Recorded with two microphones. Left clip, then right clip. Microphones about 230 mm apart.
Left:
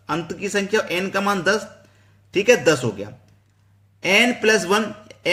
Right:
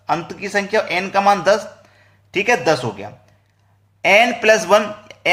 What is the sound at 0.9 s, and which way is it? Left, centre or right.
Speech, centre.